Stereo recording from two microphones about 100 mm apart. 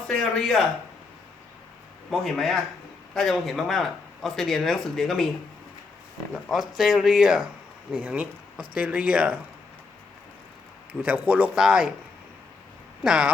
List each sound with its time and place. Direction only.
0.1 s speech: 5° left (ahead or behind)
2.0 s speech: centre (ahead or behind)
6.3 s speech: centre (ahead or behind)
11.0 s speech: 15° right (ahead or behind)
13.0 s speech: 10° right (ahead or behind)